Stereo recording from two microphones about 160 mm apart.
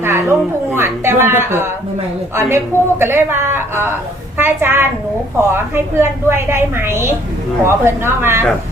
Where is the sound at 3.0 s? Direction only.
15° right (ahead or behind).